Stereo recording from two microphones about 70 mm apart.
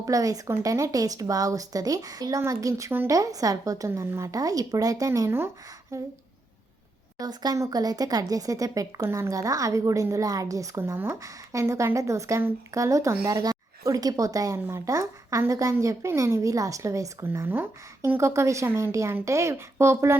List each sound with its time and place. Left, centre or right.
0.0 s speech: right
2.4 s a woman's voice: right
4.0 s speech: right
4.3 s a woman's voice: right
7.2 s a woman's voice: right
7.5 s a woman's voice: right
10.9 s speech: right
11.6 s a woman's voice: right
17.4 s a woman's voice: right
18.2 s a woman's voice: right